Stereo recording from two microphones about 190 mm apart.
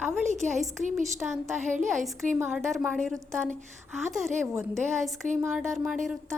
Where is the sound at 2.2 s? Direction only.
40° right (ahead or behind).